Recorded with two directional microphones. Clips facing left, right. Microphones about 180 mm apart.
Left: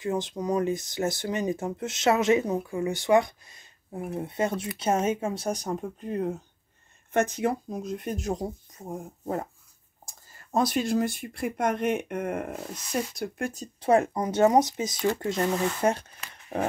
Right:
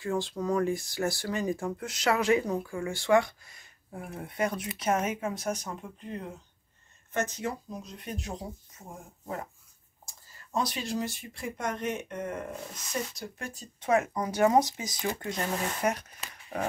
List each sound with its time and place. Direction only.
0.0 s speech: 20° left (ahead or behind); by 6.4 s 45° left (ahead or behind)
7.2 s speech: 60° left (ahead or behind); by 9.5 s 35° left (ahead or behind)
10.0 s speech: 50° left (ahead or behind)
13.7 s speech: 30° left (ahead or behind)